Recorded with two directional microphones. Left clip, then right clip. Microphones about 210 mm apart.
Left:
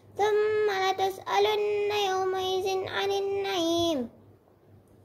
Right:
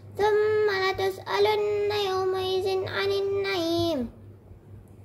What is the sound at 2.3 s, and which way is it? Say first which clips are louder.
Child singing: right 2 dB; 5° right (ahead or behind).